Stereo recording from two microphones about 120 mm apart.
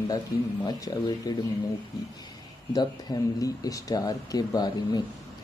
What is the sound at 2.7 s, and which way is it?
Speech, 35° left (ahead or behind).